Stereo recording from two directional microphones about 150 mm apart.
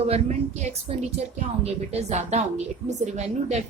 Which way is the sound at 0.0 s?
45° right (ahead or behind).